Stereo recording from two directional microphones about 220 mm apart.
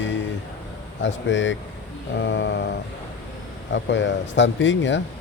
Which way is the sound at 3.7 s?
55° left (ahead or behind).